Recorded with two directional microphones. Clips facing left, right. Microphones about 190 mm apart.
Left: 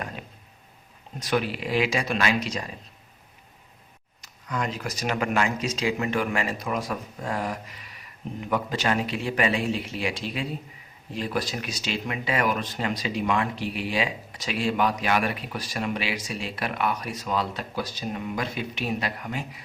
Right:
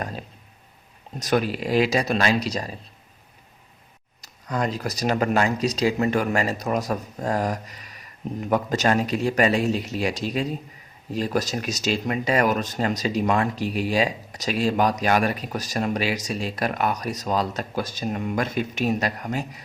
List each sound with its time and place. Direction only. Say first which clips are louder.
0.0 s speech: right 4 dB; 35° right (ahead or behind)
4.2 s speech: right 4 dB; 35° right (ahead or behind)